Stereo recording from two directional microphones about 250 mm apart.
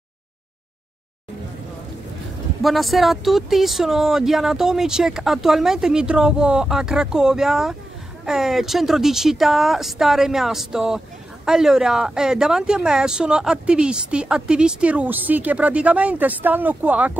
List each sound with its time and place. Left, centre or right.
2.6 s speech: centre